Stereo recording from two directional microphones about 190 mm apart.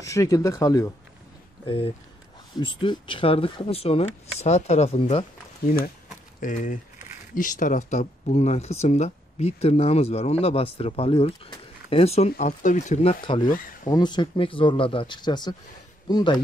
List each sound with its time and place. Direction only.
0.0 s speech: 15° left (ahead or behind)
1.7 s speech: 30° left (ahead or behind)
6.4 s speech: 40° left (ahead or behind)
13.2 s speech: 25° left (ahead or behind)